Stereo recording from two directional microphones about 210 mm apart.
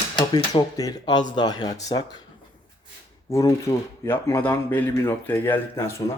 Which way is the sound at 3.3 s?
15° left (ahead or behind).